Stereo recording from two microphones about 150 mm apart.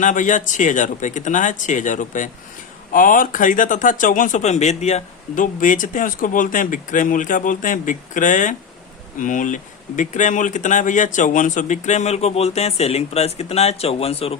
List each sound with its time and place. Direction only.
0.0 s speech: 60° left (ahead or behind); by 14.3 s 40° left (ahead or behind)